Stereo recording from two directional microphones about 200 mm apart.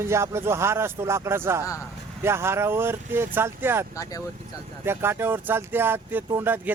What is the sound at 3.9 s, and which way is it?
Speech, 15° left (ahead or behind).